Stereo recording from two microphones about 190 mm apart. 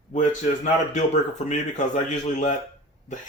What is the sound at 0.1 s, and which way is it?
Speech, 40° left (ahead or behind).